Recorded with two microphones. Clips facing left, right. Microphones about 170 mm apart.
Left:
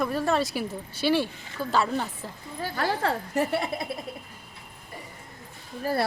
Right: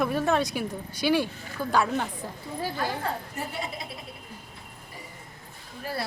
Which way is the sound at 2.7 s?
80° left.